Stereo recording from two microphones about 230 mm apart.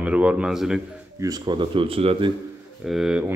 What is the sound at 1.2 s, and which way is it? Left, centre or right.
Speech, centre.